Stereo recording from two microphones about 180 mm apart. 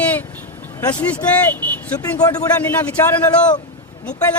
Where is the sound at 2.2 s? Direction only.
20° left (ahead or behind).